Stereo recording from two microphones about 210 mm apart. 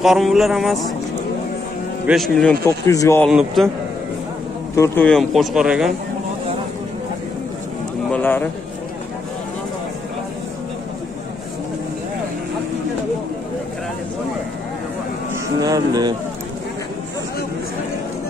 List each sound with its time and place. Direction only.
0.0 s speech: centre (ahead or behind)
2.0 s speech: centre (ahead or behind)
2.6 s speech: 15° left (ahead or behind)
3.3 s speech: 5° right (ahead or behind)
4.7 s speech: 10° left (ahead or behind)
8.1 s a sound: 10° left (ahead or behind)
15.6 s speech: 15° right (ahead or behind)